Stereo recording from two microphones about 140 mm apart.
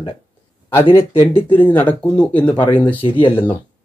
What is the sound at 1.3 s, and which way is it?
Speech, 15° left (ahead or behind).